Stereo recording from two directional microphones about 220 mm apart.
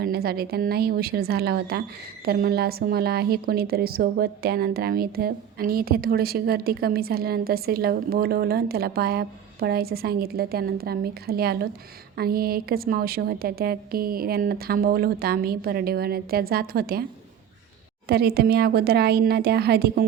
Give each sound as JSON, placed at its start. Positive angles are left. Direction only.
{"t": 0.0, "sound": "a woman's voice", "side_deg": -45}
{"t": 18.1, "sound": "a woman's voice", "side_deg": -45}